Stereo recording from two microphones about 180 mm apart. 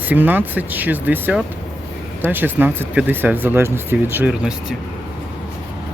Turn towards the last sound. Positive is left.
turn(degrees=-10)  # may be behind; listen again after turning